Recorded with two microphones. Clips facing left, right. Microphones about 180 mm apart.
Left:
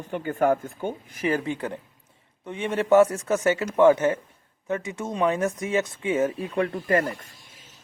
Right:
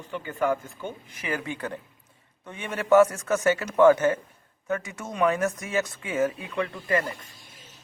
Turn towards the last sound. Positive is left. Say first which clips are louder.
# left 3 dB
turn(degrees=45)  # may be behind; listen again after turning